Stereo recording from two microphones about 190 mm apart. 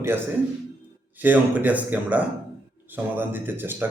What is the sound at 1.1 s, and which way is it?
A man's voice, 10° right (ahead or behind).